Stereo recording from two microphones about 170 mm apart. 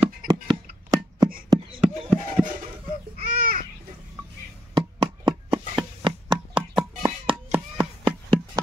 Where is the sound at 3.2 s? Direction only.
55° right (ahead or behind).